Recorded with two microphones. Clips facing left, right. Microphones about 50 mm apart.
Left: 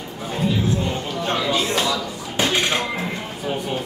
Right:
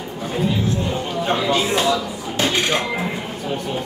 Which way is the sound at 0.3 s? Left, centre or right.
Centre.